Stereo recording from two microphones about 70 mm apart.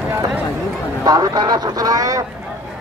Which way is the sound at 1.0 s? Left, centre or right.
Right.